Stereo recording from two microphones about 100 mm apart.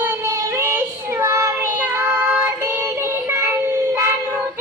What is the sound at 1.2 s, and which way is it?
Child singing, 30° right (ahead or behind).